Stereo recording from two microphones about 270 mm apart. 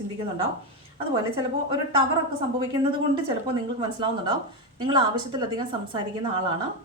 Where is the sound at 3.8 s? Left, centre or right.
Centre.